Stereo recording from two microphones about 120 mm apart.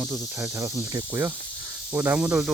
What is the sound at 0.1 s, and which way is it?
Cricket, 25° right (ahead or behind).